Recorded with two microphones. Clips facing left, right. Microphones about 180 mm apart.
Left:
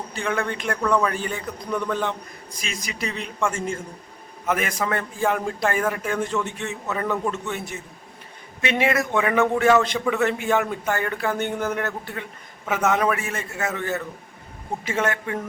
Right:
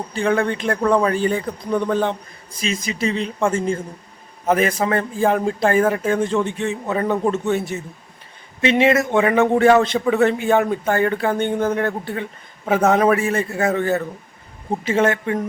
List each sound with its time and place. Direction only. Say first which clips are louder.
0.1 s a man's voice: right 7 dB; 35° right (ahead or behind)
8.7 s a man's voice: right 6 dB; 25° right (ahead or behind)